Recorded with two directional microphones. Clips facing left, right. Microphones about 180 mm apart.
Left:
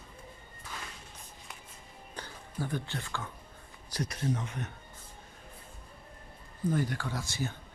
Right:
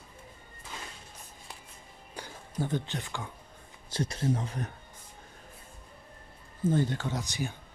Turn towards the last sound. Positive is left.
turn(degrees=-15)  # may be behind; listen again after turning